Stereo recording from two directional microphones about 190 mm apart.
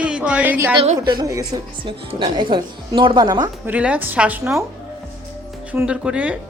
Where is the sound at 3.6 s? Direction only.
5° right (ahead or behind).